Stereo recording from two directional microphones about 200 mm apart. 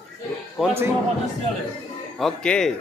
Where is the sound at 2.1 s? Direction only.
5° left (ahead or behind).